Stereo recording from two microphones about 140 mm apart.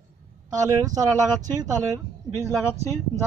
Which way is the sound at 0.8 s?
25° right (ahead or behind).